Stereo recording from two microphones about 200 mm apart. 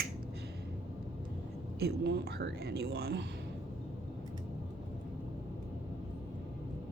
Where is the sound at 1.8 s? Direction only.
55° right (ahead or behind).